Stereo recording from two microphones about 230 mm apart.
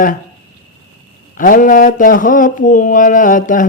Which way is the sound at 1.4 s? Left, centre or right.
Left.